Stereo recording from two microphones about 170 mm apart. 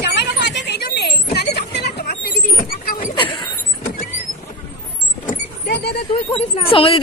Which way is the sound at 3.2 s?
30° left (ahead or behind).